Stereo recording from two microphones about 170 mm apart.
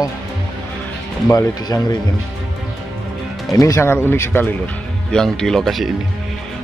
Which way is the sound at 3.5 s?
20° left (ahead or behind).